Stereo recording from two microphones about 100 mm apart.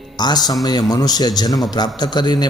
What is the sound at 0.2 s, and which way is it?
Speech, 45° left (ahead or behind).